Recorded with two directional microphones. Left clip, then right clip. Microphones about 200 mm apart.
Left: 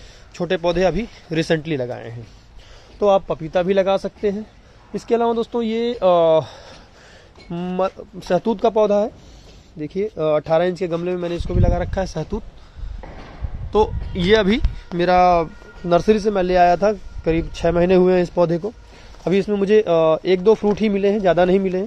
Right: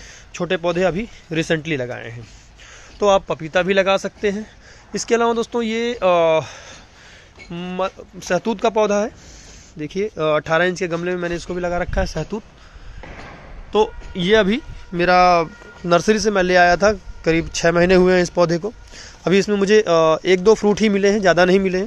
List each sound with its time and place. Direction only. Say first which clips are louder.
0.4 s speech: left 1 dB; 5° left (ahead or behind)
13.7 s speech: even; 5° left (ahead or behind)